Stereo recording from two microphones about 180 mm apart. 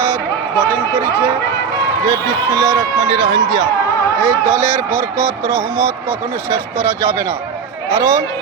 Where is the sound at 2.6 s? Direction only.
15° right (ahead or behind).